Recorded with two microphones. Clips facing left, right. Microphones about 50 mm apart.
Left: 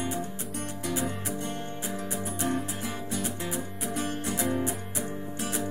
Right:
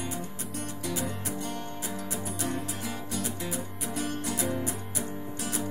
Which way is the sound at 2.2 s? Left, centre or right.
Left.